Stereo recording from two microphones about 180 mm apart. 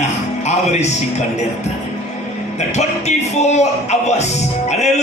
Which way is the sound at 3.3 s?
40° left (ahead or behind).